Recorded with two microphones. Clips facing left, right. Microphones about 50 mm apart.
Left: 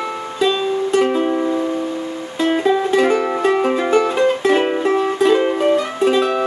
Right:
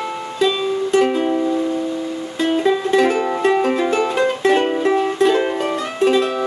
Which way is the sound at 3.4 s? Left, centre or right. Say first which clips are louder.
Even; centre.